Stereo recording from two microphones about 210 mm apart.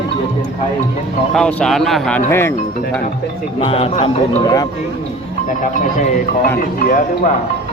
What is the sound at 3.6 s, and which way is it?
Speech, 25° left (ahead or behind).